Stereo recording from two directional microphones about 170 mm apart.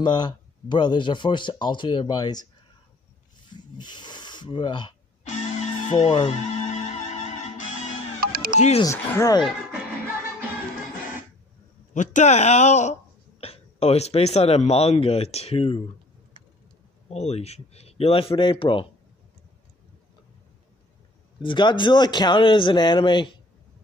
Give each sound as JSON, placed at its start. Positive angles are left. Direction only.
{"t": 0.0, "sound": "speech", "side_deg": 25}
{"t": 3.5, "sound": "speech", "side_deg": 25}
{"t": 5.3, "sound": "music", "side_deg": 45}
{"t": 8.3, "sound": "music", "side_deg": -60}
{"t": 8.5, "sound": "a man's voice", "side_deg": 40}
{"t": 8.8, "sound": "speech", "side_deg": 15}
{"t": 11.9, "sound": "a man's voice", "side_deg": 45}
{"t": 17.1, "sound": "a man's voice", "side_deg": 40}
{"t": 21.4, "sound": "speech", "side_deg": 30}